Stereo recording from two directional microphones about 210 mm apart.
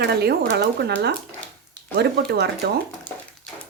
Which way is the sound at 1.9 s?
50° right (ahead or behind).